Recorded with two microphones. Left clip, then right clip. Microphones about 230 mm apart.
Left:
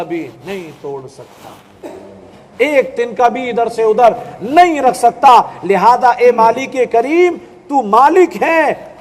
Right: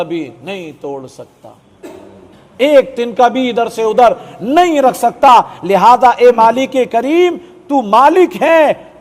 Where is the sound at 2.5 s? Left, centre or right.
Right.